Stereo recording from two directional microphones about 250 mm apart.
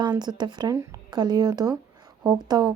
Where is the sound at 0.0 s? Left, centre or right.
Centre.